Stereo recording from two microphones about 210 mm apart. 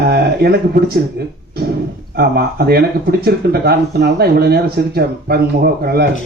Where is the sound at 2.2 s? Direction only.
50° right (ahead or behind).